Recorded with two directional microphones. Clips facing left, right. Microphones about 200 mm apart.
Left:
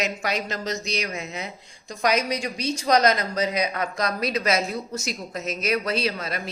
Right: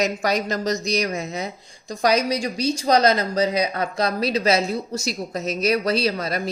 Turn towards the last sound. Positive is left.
turn(degrees=-40)  # may be behind; listen again after turning